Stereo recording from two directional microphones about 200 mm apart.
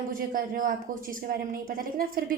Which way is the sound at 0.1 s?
45° right (ahead or behind).